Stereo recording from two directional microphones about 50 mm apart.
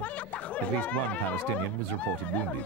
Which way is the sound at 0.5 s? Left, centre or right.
Left.